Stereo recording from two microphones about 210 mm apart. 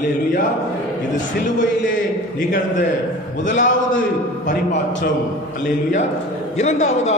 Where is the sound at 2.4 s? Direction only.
40° left (ahead or behind).